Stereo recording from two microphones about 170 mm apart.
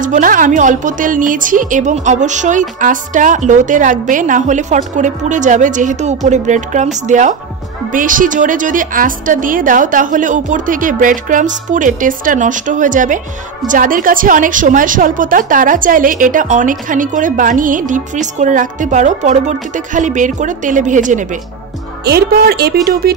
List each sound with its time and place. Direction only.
0.0 s a woman's voice: 50° right (ahead or behind)
22.0 s speech: 70° right (ahead or behind)